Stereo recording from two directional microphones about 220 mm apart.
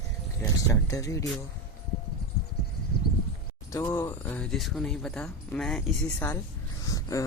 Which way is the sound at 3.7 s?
15° left (ahead or behind).